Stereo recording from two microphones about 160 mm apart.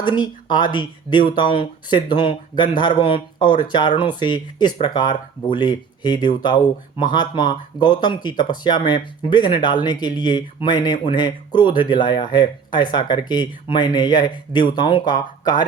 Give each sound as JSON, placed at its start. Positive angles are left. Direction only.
{"t": 0.0, "sound": "speech", "side_deg": 30}